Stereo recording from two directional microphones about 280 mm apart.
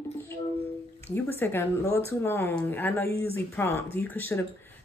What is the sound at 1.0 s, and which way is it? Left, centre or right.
A woman's voice, centre.